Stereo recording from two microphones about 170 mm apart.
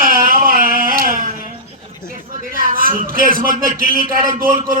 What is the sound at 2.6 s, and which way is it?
A man's voice, 55° right (ahead or behind).